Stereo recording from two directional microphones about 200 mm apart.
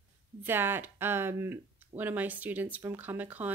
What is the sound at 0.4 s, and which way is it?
Speech, 10° right (ahead or behind).